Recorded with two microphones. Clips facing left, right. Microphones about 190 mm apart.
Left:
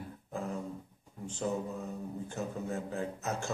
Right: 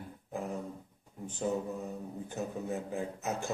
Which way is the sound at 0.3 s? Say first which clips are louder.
Right 1 dB; 15° right (ahead or behind).